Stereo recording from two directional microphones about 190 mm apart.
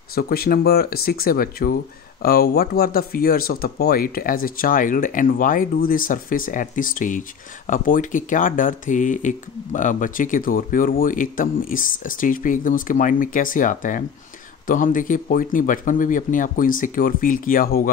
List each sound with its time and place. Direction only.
0.1 s speech: 55° left (ahead or behind)